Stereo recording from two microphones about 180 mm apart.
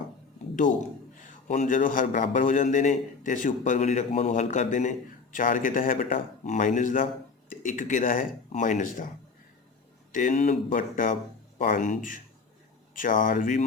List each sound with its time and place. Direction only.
1.3 s a man's voice: 45° left (ahead or behind)
10.1 s a man's voice: 45° left (ahead or behind)